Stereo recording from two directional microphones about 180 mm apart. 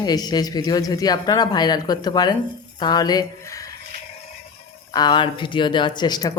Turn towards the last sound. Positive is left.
turn(degrees=20)  # may be behind; listen again after turning